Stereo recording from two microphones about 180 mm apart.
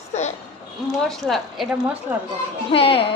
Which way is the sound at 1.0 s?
Centre (ahead or behind).